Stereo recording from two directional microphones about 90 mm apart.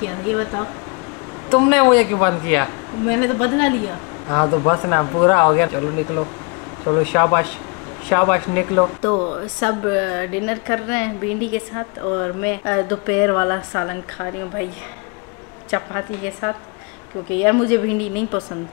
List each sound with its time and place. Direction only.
0.0 s speech: 20° left (ahead or behind)
15.7 s speech: 20° left (ahead or behind)